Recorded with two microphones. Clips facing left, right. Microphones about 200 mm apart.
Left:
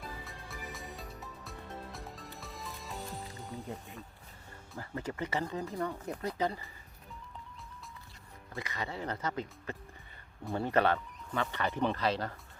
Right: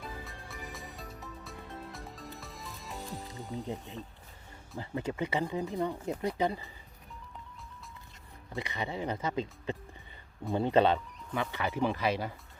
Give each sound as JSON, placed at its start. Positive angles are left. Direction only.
{"t": 0.0, "sound": "music", "side_deg": 0}
{"t": 3.5, "sound": "speech", "side_deg": -20}
{"t": 8.5, "sound": "speech", "side_deg": -20}